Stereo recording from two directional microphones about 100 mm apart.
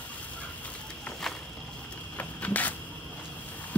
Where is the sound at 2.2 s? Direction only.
15° left (ahead or behind).